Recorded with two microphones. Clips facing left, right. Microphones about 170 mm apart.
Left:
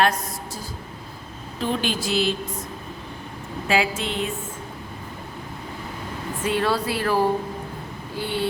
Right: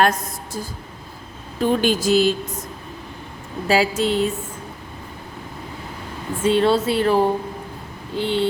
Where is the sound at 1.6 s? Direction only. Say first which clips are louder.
Right 7 dB; 45° right (ahead or behind).